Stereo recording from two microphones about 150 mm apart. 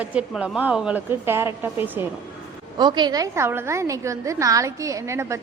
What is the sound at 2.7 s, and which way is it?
A woman's voice, 30° right (ahead or behind).